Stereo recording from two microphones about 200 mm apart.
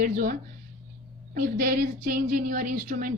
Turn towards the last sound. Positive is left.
turn(degrees=-45)  # may be behind; listen again after turning